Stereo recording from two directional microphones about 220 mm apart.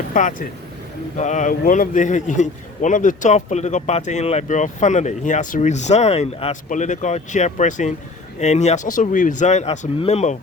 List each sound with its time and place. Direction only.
0.1 s speech: 35° left (ahead or behind)